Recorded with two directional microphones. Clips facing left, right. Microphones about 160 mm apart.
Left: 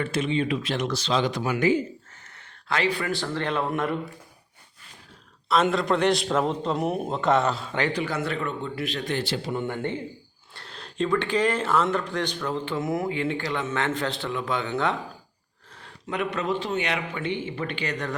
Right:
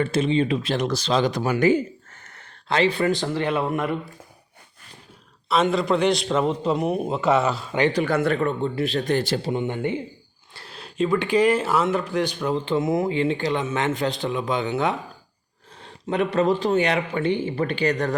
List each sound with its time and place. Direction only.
0.0 s speech: 30° right (ahead or behind)
2.6 s speech: 25° right (ahead or behind); by 3.9 s centre (ahead or behind)
5.6 s a man's voice: centre (ahead or behind)
8.0 s speech: 55° right (ahead or behind)
8.4 s speech: 35° right (ahead or behind)
9.5 s speech: 20° right (ahead or behind)
15.7 s speech: 25° right (ahead or behind)